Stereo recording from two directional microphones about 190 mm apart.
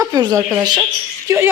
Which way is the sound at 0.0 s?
20° right (ahead or behind).